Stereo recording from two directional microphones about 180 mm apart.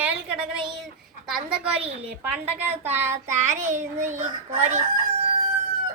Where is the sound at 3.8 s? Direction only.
40° right (ahead or behind).